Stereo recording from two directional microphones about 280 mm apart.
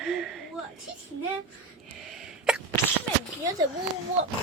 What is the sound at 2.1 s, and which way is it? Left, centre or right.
Sneeze, centre.